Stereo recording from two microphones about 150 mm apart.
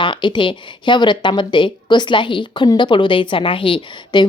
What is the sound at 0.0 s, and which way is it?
Speech, 30° left (ahead or behind).